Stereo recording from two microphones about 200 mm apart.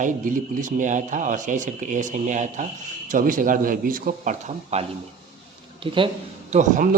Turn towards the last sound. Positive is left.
turn(degrees=-40)  # may be behind; listen again after turning